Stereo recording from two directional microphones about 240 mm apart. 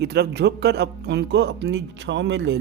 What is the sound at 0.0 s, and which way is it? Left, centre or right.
Speech, right.